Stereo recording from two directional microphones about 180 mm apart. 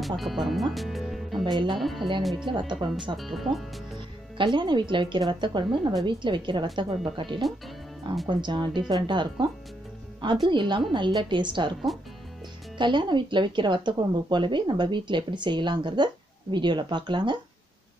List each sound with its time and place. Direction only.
0.0 s speech: centre (ahead or behind)
1.4 s speech: 25° right (ahead or behind)
1.8 s speech: centre (ahead or behind)
2.7 s speech: 25° right (ahead or behind)
3.2 s speech: centre (ahead or behind)
4.4 s speech: 25° right (ahead or behind)
12.7 s speech: 25° right (ahead or behind)